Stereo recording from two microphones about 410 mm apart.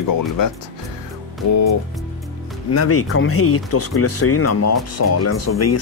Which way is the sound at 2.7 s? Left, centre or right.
Left.